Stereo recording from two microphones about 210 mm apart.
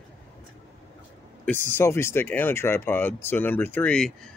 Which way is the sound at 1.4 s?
10° left (ahead or behind).